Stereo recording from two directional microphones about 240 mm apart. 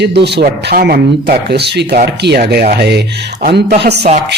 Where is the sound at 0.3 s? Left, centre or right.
Right.